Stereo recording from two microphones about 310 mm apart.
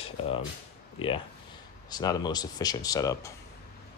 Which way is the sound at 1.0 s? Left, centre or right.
Centre.